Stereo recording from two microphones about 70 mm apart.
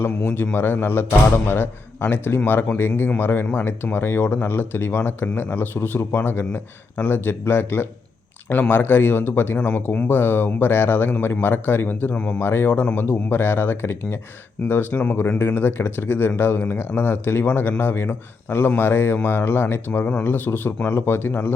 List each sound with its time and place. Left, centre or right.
0.0 s speech: left